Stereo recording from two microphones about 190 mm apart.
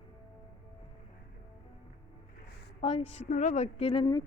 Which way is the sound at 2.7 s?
35° left (ahead or behind).